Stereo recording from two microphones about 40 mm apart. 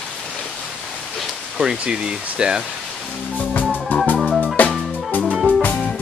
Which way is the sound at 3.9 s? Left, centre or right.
Left.